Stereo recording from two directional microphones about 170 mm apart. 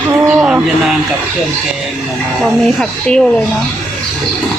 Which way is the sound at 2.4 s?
Centre (ahead or behind).